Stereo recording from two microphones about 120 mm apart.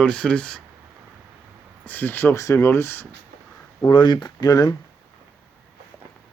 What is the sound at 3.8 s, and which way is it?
Speech, 40° left (ahead or behind).